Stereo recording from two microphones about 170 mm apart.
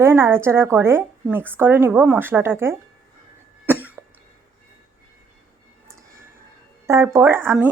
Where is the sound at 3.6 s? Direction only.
10° right (ahead or behind).